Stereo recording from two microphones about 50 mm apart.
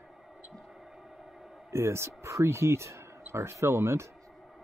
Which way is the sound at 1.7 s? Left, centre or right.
Right.